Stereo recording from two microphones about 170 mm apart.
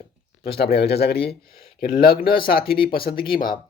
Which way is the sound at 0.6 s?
70° left (ahead or behind).